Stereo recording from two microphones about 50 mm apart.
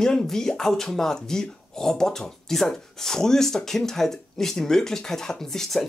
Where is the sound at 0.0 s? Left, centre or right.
Centre.